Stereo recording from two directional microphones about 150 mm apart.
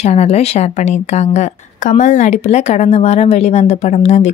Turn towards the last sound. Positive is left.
turn(degrees=45)  # may be behind; listen again after turning